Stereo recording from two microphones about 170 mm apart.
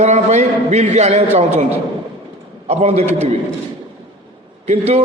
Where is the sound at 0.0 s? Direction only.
45° right (ahead or behind).